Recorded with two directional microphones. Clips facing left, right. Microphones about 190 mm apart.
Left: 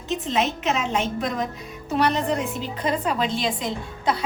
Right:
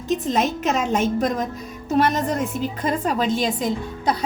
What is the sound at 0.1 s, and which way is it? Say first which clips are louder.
A woman's voice: right 3 dB; 45° right (ahead or behind).